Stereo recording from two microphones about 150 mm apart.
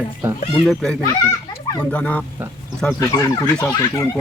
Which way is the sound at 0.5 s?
5° left (ahead or behind).